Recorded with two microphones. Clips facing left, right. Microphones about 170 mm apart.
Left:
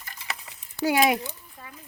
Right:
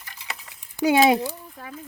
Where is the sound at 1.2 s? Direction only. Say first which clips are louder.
Right 8 dB; 90° right.